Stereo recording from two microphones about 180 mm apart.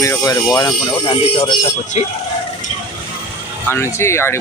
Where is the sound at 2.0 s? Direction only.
35° left (ahead or behind).